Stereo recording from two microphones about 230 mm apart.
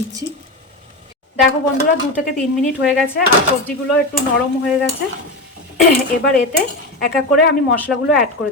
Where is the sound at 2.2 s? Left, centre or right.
Centre.